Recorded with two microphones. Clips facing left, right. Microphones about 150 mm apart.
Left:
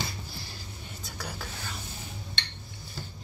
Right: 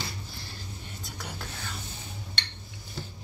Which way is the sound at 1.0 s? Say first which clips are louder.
Left 1 dB; centre (ahead or behind).